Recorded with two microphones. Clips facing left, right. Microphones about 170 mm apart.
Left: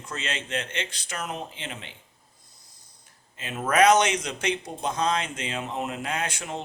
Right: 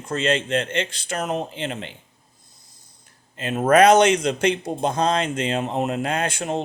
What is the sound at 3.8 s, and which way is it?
Speech, 30° right (ahead or behind).